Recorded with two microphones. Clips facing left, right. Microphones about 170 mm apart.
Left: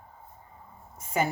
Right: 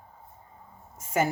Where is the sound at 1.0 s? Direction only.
45° right (ahead or behind).